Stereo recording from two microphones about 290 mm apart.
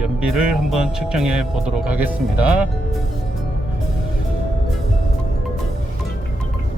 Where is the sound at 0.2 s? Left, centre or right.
Centre.